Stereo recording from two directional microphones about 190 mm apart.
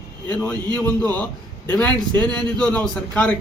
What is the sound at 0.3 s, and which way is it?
A man's voice, 5° left (ahead or behind).